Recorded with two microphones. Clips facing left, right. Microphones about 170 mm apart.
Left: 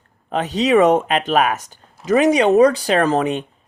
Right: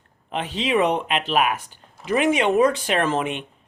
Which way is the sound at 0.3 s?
40° left (ahead or behind).